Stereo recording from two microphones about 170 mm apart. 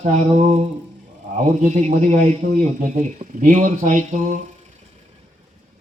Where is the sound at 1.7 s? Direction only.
45° right (ahead or behind).